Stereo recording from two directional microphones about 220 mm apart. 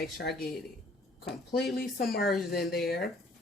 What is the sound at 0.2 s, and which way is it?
Speech, 50° left (ahead or behind).